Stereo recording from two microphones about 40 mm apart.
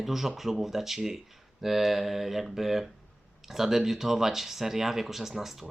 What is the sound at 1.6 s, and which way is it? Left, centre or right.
Mantra, centre.